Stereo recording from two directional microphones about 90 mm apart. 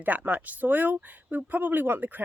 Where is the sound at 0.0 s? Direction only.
20° right (ahead or behind).